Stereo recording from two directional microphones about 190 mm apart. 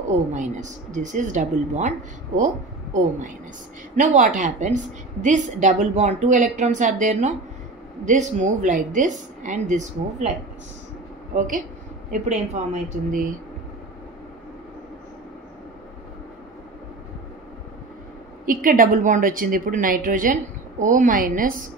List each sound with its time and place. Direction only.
0.3 s a woman's voice: 40° right (ahead or behind)
11.3 s a woman's voice: 45° right (ahead or behind)
18.4 s a woman's voice: 45° right (ahead or behind)